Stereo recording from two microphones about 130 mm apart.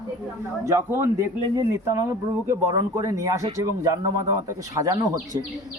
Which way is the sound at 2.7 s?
25° right (ahead or behind).